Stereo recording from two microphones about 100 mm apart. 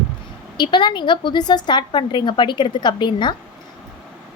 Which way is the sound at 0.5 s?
50° left (ahead or behind).